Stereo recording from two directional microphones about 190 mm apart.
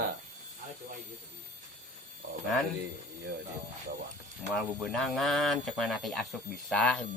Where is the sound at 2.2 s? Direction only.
60° right (ahead or behind).